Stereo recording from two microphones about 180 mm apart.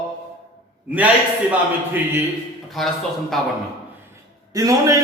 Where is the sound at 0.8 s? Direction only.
10° right (ahead or behind).